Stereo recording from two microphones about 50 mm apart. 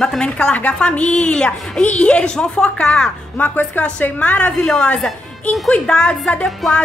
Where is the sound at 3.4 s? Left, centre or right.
Left.